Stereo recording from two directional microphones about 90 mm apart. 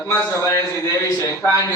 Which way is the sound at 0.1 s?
25° left (ahead or behind).